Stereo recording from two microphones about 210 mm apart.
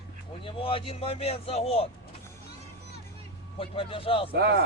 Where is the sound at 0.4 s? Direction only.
25° left (ahead or behind).